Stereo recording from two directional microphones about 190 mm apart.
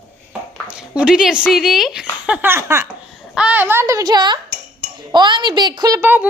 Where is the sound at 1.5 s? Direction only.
Centre (ahead or behind).